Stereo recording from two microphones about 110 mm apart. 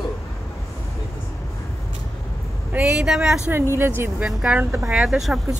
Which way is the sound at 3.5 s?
20° right (ahead or behind).